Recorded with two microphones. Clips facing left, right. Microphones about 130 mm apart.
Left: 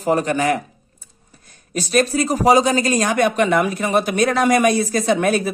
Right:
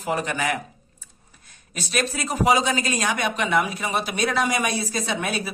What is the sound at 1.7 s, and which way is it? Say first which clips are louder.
Speech: left 9 dB; 40° left (ahead or behind).